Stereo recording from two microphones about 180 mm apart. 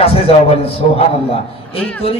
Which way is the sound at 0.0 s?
35° left (ahead or behind).